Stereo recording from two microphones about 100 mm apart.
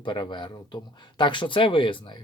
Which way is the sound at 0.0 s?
50° left (ahead or behind).